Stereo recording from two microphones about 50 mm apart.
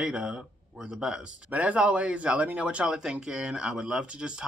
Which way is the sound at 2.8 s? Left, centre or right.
Centre.